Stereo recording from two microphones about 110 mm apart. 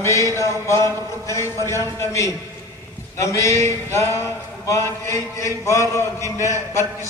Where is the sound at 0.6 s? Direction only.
25° left (ahead or behind).